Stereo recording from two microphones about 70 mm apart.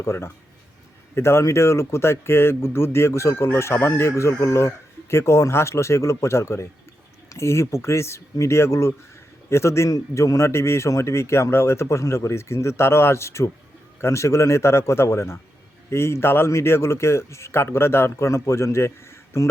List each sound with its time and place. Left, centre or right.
0.0 s a man's voice: left